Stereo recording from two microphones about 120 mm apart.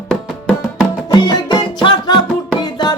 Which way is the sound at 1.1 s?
35° left (ahead or behind).